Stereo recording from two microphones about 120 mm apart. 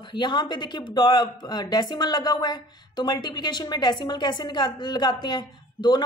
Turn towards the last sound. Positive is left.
turn(degrees=35)  # may be behind; listen again after turning